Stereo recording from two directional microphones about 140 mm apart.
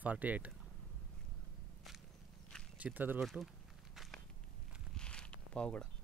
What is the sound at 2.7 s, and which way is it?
Speech, 10° right (ahead or behind).